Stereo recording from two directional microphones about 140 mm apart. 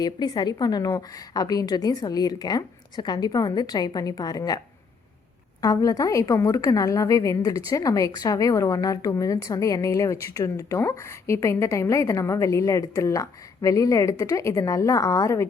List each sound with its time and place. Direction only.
0.0 s a woman's voice: 30° left (ahead or behind)
5.6 s a woman's voice: 25° left (ahead or behind)